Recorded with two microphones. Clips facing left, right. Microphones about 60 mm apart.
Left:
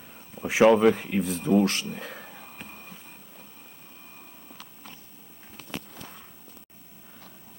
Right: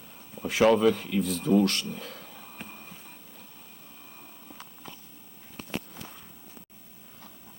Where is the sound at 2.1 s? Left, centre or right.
Left.